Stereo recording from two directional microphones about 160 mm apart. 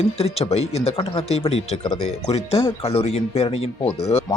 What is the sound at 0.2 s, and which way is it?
Speech, 40° left (ahead or behind).